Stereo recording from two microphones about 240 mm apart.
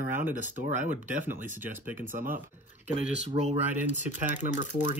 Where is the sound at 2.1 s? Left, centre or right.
Right.